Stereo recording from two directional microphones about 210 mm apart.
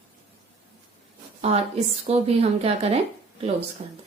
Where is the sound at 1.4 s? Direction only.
30° right (ahead or behind).